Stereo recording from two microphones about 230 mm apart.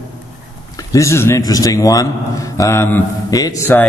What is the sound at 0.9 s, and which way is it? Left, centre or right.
A man's voice, centre.